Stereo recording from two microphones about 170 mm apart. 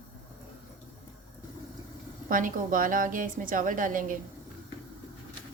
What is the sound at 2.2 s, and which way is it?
A woman's voice, 50° right (ahead or behind).